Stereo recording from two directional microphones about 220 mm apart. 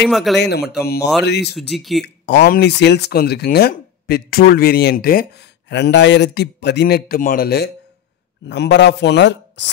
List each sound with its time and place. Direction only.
0.0 s speech: centre (ahead or behind)
0.4 s speech: 50° left (ahead or behind)
1.5 s speech: centre (ahead or behind)
2.2 s speech: 45° left (ahead or behind)